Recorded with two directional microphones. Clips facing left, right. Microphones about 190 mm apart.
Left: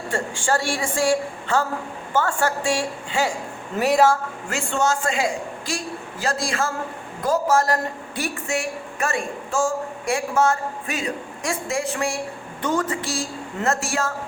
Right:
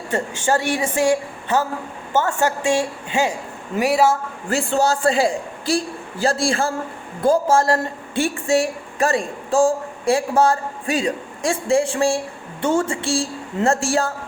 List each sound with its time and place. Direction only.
0.1 s a woman's voice: 20° right (ahead or behind)
3.8 s speech: 10° right (ahead or behind)
4.4 s a woman's voice: 35° right (ahead or behind)